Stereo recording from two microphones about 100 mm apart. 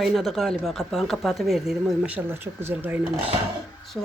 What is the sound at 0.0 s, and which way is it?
Speech, centre (ahead or behind).